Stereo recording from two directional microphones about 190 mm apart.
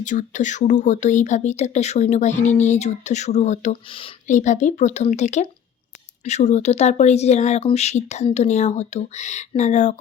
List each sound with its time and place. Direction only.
0.0 s speech: 40° left (ahead or behind)
4.3 s speech: 40° left (ahead or behind)